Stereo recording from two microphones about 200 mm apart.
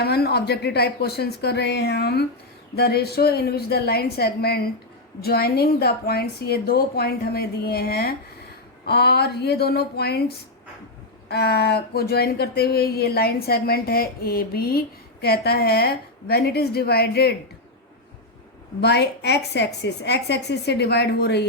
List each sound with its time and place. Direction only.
0.0 s speech: 55° left (ahead or behind)
18.8 s a woman's voice: 55° left (ahead or behind)